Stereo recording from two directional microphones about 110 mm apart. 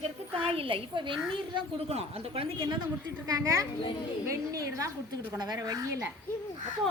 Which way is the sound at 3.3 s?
30° right (ahead or behind).